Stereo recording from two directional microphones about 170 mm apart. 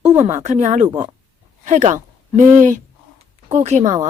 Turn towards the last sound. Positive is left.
turn(degrees=-45)  # may be behind; listen again after turning